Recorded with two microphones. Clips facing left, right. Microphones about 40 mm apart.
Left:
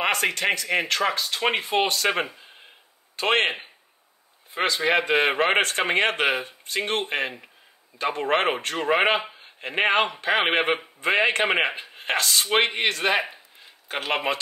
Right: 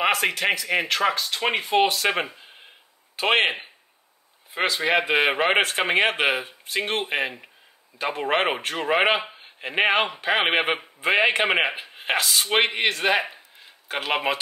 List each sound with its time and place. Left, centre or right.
0.0 s speech: centre
4.6 s speech: centre
9.2 s speech: centre